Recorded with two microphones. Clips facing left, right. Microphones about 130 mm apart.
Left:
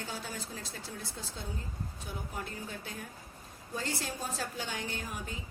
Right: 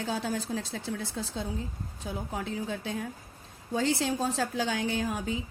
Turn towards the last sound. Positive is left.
turn(degrees=-90)